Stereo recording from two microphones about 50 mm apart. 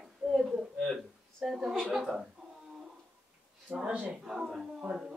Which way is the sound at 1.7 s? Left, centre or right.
Centre.